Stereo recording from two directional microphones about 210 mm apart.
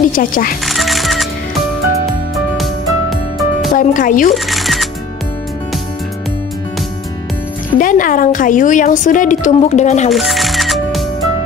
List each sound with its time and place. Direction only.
0.1 s a woman's voice: 40° left (ahead or behind)
0.7 s music: centre (ahead or behind)
2.3 s music: centre (ahead or behind)
3.7 s a woman's voice: 40° left (ahead or behind)
4.3 s camera: centre (ahead or behind)
7.8 s a woman's voice: 40° left (ahead or behind)
10.1 s music: centre (ahead or behind)